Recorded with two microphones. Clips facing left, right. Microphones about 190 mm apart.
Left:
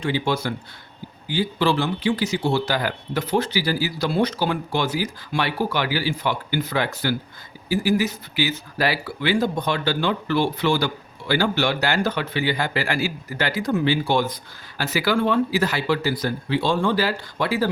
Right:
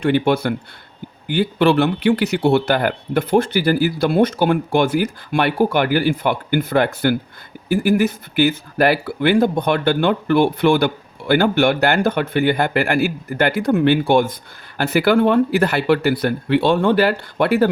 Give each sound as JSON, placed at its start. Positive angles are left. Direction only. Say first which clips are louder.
{"t": 0.0, "sound": "speech", "louder": "right 7 dB", "side_deg": -60}